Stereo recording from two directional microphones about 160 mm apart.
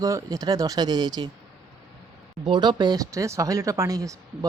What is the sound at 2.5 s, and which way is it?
Speech, 25° right (ahead or behind).